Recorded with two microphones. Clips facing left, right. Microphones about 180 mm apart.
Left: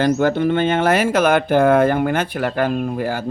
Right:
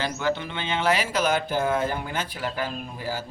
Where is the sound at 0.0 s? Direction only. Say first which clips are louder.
Left 11 dB; 50° left (ahead or behind).